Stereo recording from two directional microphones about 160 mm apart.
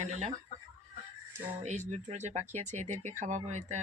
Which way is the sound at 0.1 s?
45° right (ahead or behind).